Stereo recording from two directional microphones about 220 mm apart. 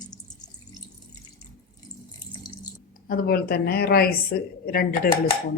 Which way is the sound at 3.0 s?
40° left (ahead or behind).